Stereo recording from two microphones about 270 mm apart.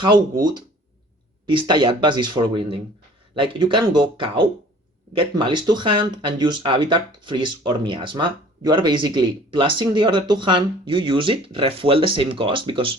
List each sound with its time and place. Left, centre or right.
1.5 s speech: centre